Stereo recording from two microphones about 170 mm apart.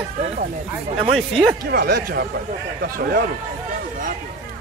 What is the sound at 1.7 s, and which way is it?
Speech, 60° right (ahead or behind).